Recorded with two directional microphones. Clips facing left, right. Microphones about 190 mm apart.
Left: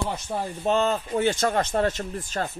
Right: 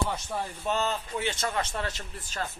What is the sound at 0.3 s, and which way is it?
Speech, 35° left (ahead or behind).